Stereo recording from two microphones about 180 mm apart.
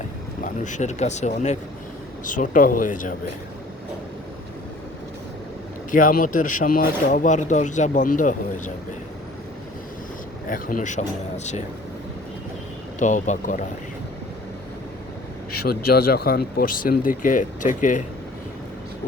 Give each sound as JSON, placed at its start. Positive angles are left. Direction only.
{"t": 0.4, "sound": "speech", "side_deg": 45}
{"t": 5.9, "sound": "speech", "side_deg": 50}
{"t": 10.5, "sound": "speech", "side_deg": 50}
{"t": 13.0, "sound": "speech", "side_deg": 45}
{"t": 15.5, "sound": "speech", "side_deg": 60}